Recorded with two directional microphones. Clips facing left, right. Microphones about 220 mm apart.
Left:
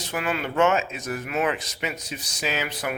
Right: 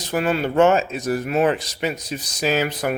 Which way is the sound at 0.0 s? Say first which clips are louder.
Right 7 dB; 35° right (ahead or behind).